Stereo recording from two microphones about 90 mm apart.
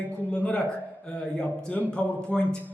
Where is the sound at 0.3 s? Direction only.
10° left (ahead or behind).